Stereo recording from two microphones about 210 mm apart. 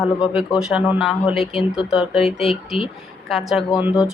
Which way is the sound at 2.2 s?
25° left (ahead or behind).